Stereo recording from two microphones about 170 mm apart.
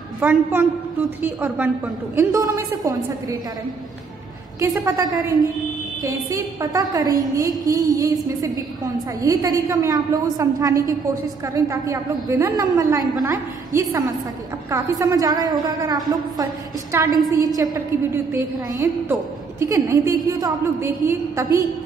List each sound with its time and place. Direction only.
0.2 s a woman's voice: 10° right (ahead or behind)
4.6 s a woman's voice: 20° right (ahead or behind)